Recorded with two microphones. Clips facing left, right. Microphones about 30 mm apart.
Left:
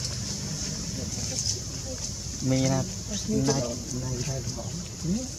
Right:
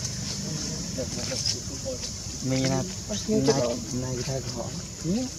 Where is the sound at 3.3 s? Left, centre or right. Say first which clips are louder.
Right 4 dB; right.